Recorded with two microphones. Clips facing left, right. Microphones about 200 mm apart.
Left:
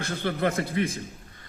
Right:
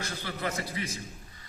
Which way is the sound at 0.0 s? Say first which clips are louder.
Left 8 dB; 55° left (ahead or behind).